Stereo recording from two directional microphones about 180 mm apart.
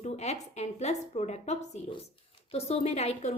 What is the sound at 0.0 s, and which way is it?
A woman's voice, 40° left (ahead or behind).